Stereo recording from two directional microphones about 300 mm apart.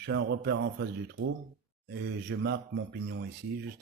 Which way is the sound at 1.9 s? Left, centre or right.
Right.